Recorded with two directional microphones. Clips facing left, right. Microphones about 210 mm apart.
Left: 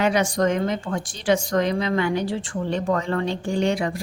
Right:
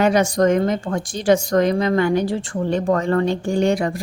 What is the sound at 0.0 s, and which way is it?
A woman's voice, 45° right (ahead or behind).